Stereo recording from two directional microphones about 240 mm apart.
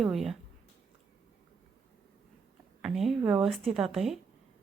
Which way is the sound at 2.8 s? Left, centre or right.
Centre.